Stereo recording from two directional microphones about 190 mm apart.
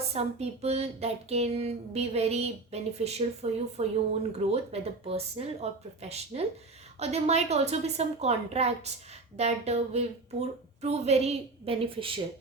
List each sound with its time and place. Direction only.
0.1 s speech: 35° right (ahead or behind)